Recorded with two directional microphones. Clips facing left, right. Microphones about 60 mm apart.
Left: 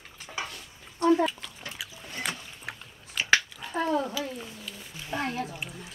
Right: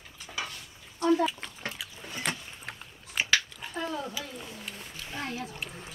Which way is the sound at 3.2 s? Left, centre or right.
Left.